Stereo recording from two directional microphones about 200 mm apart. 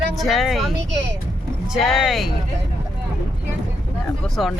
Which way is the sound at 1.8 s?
Centre (ahead or behind).